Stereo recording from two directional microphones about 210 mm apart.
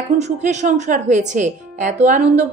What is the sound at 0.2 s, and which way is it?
Speech, 35° right (ahead or behind).